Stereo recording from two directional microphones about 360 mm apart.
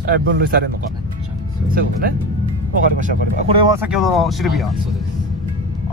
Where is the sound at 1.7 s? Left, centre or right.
Right.